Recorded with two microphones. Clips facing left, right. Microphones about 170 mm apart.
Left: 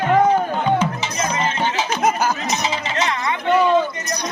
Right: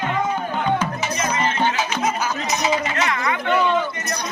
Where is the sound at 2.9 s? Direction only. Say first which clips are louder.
Even; 25° left (ahead or behind).